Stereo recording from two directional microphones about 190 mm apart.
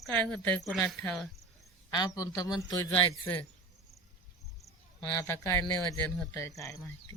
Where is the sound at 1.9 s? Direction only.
20° left (ahead or behind).